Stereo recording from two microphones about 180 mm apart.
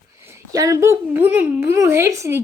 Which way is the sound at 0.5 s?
20° right (ahead or behind).